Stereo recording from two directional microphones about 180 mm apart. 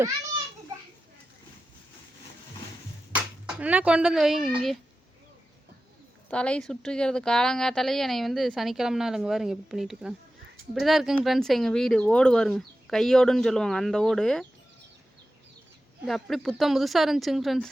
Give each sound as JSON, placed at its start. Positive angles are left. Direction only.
{"t": 3.2, "sound": "speech", "side_deg": -10}
{"t": 6.3, "sound": "speech", "side_deg": 5}
{"t": 16.0, "sound": "speech", "side_deg": 0}